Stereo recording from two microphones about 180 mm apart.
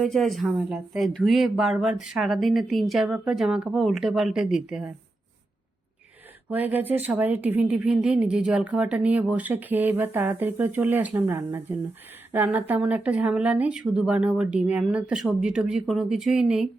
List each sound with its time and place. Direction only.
0.0 s speech: centre (ahead or behind)
6.5 s speech: 10° right (ahead or behind)